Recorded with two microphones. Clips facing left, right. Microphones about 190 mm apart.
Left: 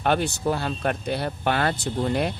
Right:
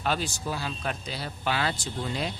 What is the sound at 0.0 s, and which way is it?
Speech, 60° left (ahead or behind).